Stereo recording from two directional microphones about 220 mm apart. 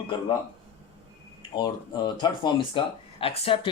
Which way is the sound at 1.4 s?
20° left (ahead or behind).